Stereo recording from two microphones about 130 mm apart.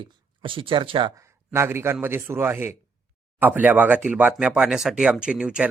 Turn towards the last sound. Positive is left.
turn(degrees=-5)  # may be behind; listen again after turning